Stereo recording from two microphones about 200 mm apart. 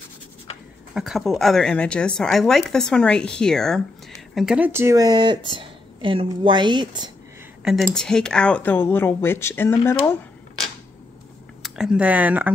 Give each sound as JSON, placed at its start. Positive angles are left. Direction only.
{"t": 0.9, "sound": "speech", "side_deg": 0}
{"t": 7.6, "sound": "speech", "side_deg": 0}
{"t": 11.6, "sound": "speech", "side_deg": -5}